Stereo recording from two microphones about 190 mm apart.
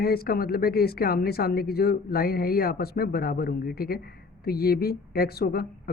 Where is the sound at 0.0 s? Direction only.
55° left (ahead or behind).